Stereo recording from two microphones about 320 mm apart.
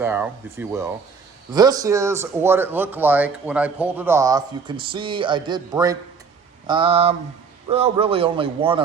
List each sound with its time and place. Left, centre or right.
0.0 s speech: centre